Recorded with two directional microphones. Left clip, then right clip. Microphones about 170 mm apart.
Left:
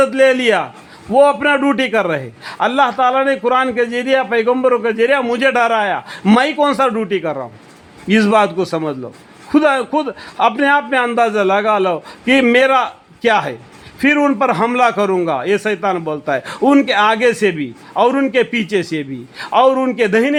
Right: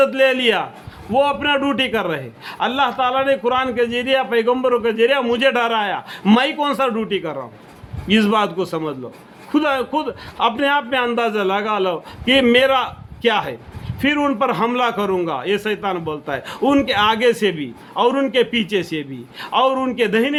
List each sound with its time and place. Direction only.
0.0 s a man's voice: 45° left (ahead or behind)